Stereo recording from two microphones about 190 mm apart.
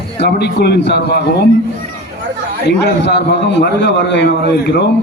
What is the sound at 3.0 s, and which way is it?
A man's voice, 65° left (ahead or behind).